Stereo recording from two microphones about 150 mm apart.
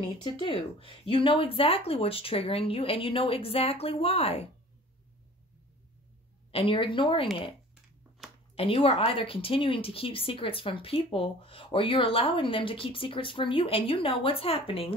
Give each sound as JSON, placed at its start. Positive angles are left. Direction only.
{"t": 0.2, "sound": "speech", "side_deg": 35}
{"t": 6.5, "sound": "speech", "side_deg": 35}
{"t": 8.5, "sound": "speech", "side_deg": 40}